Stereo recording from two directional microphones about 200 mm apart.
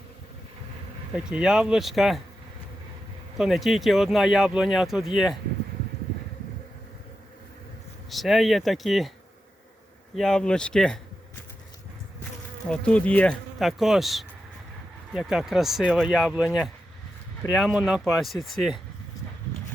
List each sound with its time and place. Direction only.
1.1 s speech: 5° right (ahead or behind)
3.3 s speech: centre (ahead or behind)
8.1 s speech: centre (ahead or behind)
10.2 s speech: 5° left (ahead or behind)
12.6 s speech: 5° left (ahead or behind)